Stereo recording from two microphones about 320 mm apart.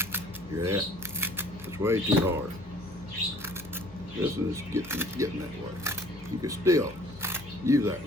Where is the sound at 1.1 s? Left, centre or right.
Centre.